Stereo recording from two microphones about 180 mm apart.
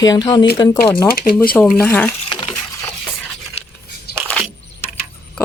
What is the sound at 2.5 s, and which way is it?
Crushing, 10° left (ahead or behind).